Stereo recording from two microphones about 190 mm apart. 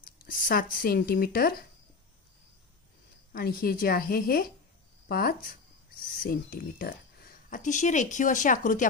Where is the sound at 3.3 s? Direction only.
50° left (ahead or behind).